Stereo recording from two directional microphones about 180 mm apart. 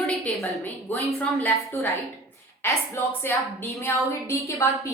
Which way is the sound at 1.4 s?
10° left (ahead or behind).